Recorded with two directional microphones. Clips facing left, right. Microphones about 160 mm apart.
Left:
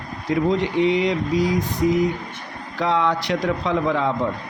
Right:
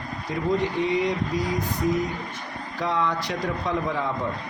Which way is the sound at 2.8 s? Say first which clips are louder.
Left 5 dB; 90° left.